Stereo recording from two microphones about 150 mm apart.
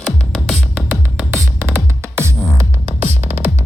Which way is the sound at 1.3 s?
15° right (ahead or behind).